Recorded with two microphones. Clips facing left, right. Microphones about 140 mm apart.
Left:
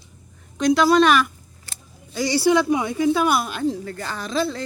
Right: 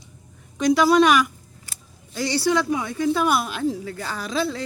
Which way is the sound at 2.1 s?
5° left (ahead or behind).